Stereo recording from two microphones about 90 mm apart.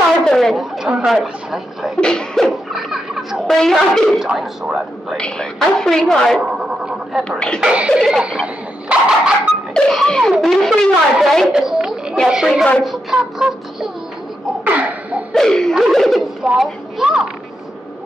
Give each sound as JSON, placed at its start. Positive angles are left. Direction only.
{"t": 0.2, "sound": "a sound", "side_deg": 5}
{"t": 0.8, "sound": "speech", "side_deg": -5}
{"t": 2.0, "sound": "speech", "side_deg": 10}
{"t": 6.4, "sound": "neigh", "side_deg": -10}
{"t": 7.2, "sound": "speech", "side_deg": 10}
{"t": 7.6, "sound": "a woman's voice", "side_deg": -10}
{"t": 7.9, "sound": "speech", "side_deg": 0}
{"t": 8.3, "sound": "a sound", "side_deg": -10}
{"t": 9.8, "sound": "speech", "side_deg": 5}
{"t": 11.5, "sound": "a sound", "side_deg": -5}
{"t": 12.3, "sound": "speech", "side_deg": -5}
{"t": 14.6, "sound": "a sound", "side_deg": -15}
{"t": 15.3, "sound": "a woman's voice", "side_deg": 5}